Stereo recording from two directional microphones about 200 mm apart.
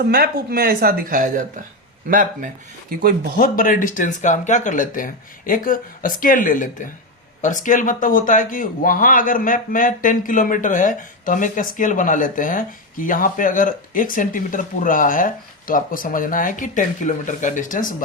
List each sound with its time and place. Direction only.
0.0 s a woman's voice: 50° right (ahead or behind)
3.3 s speech: 45° left (ahead or behind)